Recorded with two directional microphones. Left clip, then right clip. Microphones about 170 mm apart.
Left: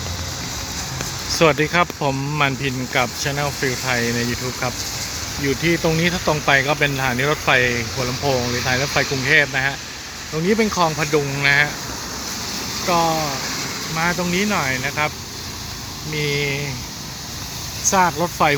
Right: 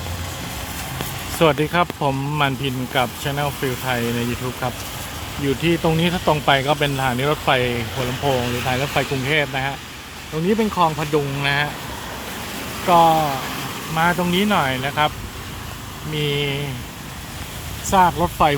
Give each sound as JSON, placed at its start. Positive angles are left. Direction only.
{"t": 1.3, "sound": "speech", "side_deg": -5}
{"t": 5.6, "sound": "speech", "side_deg": -10}
{"t": 12.9, "sound": "speech", "side_deg": -15}
{"t": 16.1, "sound": "speech", "side_deg": -15}
{"t": 17.9, "sound": "speech", "side_deg": -5}